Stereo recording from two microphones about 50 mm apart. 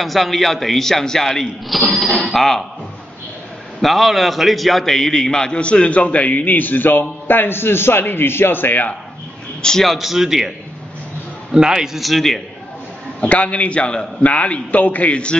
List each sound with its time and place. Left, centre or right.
0.0 s a man's voice: centre
3.8 s a man's voice: centre; by 8.9 s left
9.6 s a man's voice: centre
9.8 s a man's voice: centre
11.5 s a man's voice: centre
13.2 s a man's voice: left